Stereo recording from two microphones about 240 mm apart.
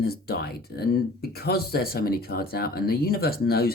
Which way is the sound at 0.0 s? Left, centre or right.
Left.